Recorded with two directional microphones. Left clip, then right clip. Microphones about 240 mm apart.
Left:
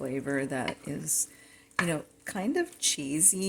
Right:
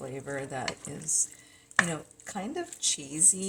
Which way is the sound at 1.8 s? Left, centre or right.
Left.